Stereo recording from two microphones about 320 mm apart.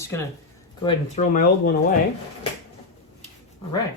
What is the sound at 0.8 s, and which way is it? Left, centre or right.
Speech, left.